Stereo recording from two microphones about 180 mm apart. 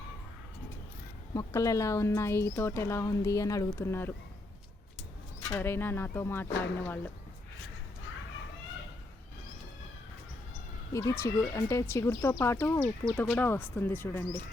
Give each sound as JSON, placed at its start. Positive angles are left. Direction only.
{"t": 1.3, "sound": "speech", "side_deg": 20}
{"t": 5.5, "sound": "speech", "side_deg": 10}
{"t": 10.9, "sound": "speech", "side_deg": 15}